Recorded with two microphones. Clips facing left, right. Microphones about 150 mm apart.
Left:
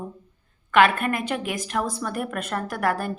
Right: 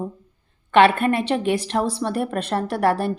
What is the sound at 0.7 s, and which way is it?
A woman's voice, 30° right (ahead or behind).